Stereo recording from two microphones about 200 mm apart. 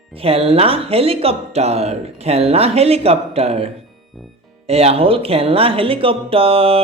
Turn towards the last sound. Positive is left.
turn(degrees=-30)  # may be behind; listen again after turning